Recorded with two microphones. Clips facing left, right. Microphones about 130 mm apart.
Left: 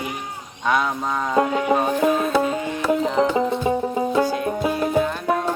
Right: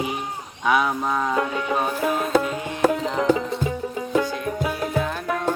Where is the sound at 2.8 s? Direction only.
45° right (ahead or behind).